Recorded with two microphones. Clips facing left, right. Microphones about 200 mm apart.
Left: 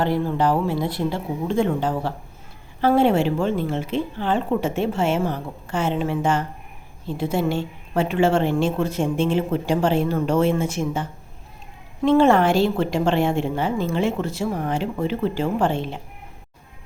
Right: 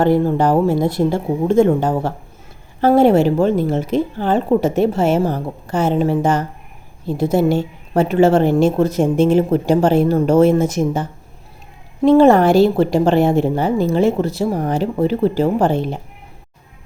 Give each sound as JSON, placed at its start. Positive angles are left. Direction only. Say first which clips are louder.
{"t": 0.0, "sound": "a woman's voice", "louder": "right 6 dB", "side_deg": -45}
{"t": 12.0, "sound": "a woman's voice", "louder": "right 6 dB", "side_deg": -40}